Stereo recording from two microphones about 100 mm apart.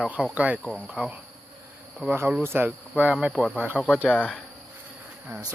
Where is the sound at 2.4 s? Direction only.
20° right (ahead or behind).